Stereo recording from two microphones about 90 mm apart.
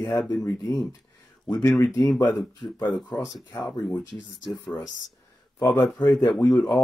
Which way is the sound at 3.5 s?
25° left (ahead or behind).